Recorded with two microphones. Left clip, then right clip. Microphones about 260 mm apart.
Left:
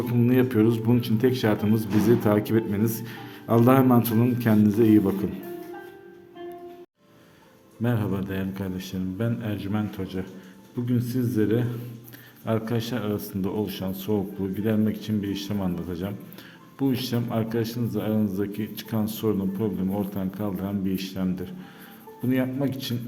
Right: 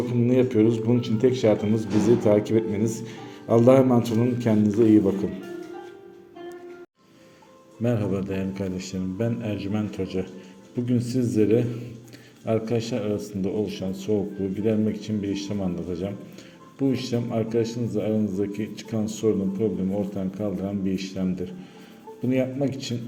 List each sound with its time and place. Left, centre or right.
0.1 s a man's voice: centre
7.8 s a man's voice: centre
12.5 s a man's voice: centre